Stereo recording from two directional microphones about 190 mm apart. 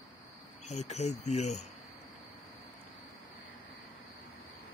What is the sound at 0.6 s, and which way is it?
Speech, 35° left (ahead or behind).